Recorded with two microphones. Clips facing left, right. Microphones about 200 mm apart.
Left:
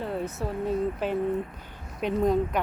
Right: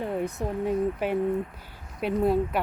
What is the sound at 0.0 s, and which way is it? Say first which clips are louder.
Speech: right 2 dB; 15° right (ahead or behind).